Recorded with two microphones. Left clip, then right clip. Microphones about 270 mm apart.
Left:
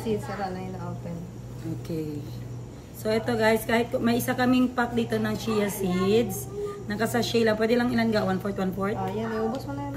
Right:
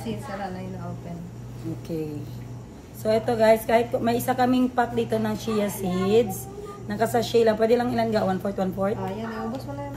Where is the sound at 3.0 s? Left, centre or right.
Centre.